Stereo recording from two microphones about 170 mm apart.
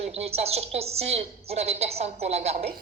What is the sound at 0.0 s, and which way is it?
A woman's voice, 40° right (ahead or behind).